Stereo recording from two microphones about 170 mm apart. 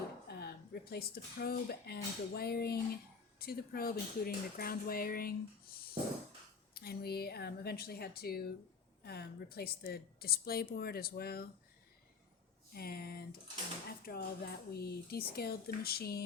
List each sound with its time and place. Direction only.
0.3 s speech: 70° left (ahead or behind)
12.7 s speech: 65° left (ahead or behind)